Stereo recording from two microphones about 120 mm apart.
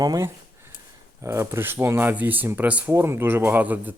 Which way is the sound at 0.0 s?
30° right (ahead or behind).